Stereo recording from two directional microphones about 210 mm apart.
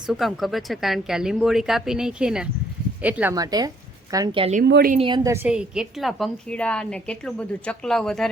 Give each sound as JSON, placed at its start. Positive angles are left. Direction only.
{"t": 0.1, "sound": "a woman's voice", "side_deg": 0}
{"t": 4.7, "sound": "a woman's voice", "side_deg": -45}
{"t": 4.9, "sound": "a woman's voice", "side_deg": -20}